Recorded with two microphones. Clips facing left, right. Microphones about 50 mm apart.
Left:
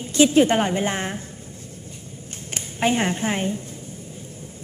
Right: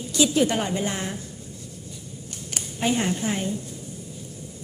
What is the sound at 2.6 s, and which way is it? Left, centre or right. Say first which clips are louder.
A woman's voice: left 3 dB; left.